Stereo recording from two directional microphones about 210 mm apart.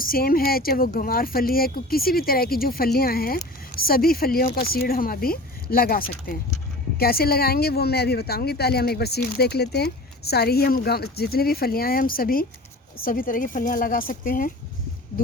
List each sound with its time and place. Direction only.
0.0 s speech: 45° left (ahead or behind)